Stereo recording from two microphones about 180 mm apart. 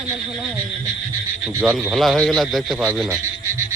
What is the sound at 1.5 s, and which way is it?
Speech, 15° right (ahead or behind).